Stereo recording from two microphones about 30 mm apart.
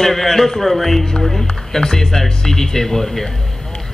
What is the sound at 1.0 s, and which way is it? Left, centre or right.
Speech, centre.